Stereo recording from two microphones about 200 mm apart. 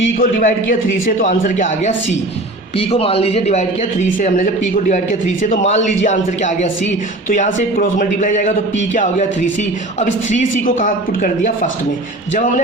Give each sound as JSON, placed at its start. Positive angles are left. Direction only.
{"t": 0.2, "sound": "a man's voice", "side_deg": 45}
{"t": 5.4, "sound": "a man's voice", "side_deg": 35}
{"t": 10.2, "sound": "a man's voice", "side_deg": 40}